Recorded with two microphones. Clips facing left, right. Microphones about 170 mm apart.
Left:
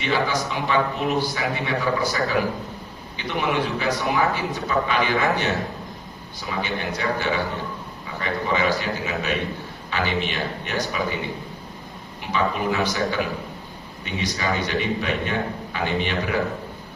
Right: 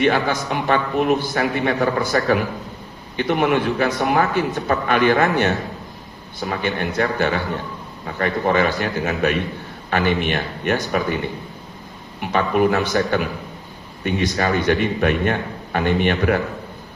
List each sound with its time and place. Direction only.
0.0 s a man's voice: 55° right (ahead or behind)
12.2 s a man's voice: 55° right (ahead or behind)